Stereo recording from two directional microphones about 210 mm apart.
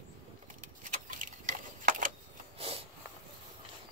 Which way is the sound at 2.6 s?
25° right (ahead or behind).